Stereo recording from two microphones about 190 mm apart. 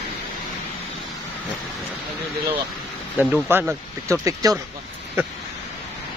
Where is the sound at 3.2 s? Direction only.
10° right (ahead or behind).